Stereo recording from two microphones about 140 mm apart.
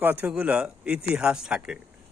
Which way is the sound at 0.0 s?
10° right (ahead or behind).